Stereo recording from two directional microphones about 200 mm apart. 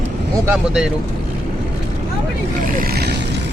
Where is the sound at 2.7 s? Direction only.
50° right (ahead or behind).